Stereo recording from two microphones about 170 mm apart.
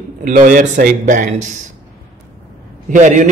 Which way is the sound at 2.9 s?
45° right (ahead or behind).